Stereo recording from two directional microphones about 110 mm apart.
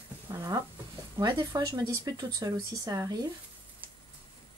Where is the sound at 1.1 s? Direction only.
35° right (ahead or behind).